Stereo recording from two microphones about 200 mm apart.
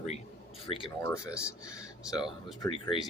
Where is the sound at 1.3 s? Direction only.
5° right (ahead or behind).